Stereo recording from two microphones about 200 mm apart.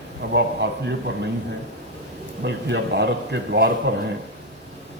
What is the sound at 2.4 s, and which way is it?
A man's voice, 60° right (ahead or behind).